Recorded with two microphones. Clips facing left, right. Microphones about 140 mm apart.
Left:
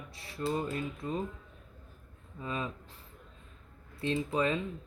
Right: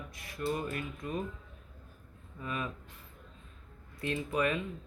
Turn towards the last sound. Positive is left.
turn(degrees=25)  # may be behind; listen again after turning